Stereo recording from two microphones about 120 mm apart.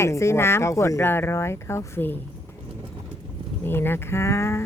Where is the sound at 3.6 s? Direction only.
20° left (ahead or behind).